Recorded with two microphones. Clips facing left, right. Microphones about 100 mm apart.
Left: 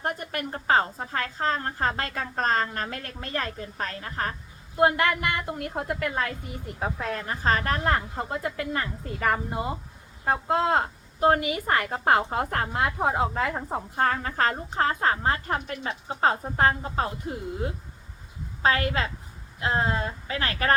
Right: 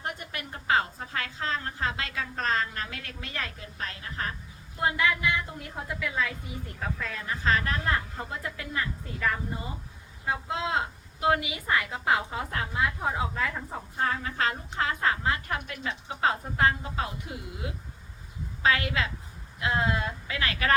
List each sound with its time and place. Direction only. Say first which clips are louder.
0.0 s a woman's voice: left 6 dB; 45° left (ahead or behind)
4.8 s a woman's voice: left 5 dB; 60° left (ahead or behind)
6.2 s a woman's voice: left 2 dB; centre (ahead or behind)
7.0 s a woman's voice: left 2 dB; 50° left (ahead or behind)
9.2 s a woman's voice: left 5 dB; 65° left (ahead or behind)
10.2 s a woman's voice: left 7 dB; 50° left (ahead or behind)